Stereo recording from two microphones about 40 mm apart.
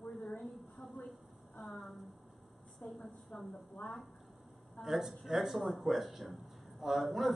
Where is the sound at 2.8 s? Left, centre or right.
Left.